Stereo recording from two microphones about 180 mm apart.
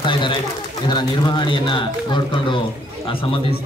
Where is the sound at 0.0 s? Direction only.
25° left (ahead or behind).